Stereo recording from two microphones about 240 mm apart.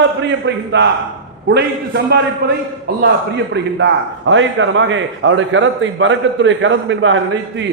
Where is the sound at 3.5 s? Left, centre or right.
Right.